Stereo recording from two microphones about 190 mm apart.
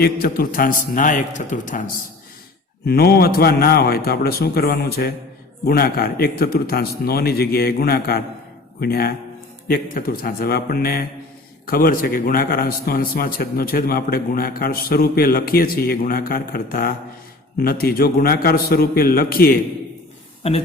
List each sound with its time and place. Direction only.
0.0 s a man's voice: 50° left (ahead or behind)
2.8 s a man's voice: 55° left (ahead or behind)
20.4 s speech: 30° left (ahead or behind)